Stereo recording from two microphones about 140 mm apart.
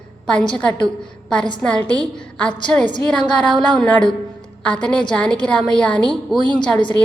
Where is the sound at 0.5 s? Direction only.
5° left (ahead or behind).